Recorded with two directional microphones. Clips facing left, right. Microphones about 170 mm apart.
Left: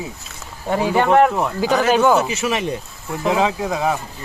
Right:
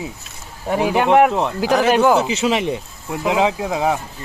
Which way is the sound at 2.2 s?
15° right (ahead or behind).